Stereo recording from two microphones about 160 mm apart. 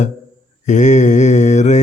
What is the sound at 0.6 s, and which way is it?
Mantra, 50° left (ahead or behind).